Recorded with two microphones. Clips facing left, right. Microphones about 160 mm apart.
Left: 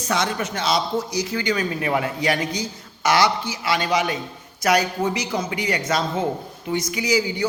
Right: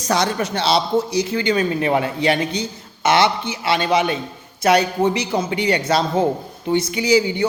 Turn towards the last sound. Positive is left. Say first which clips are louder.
# right 5 dB
turn(degrees=-30)  # may be behind; listen again after turning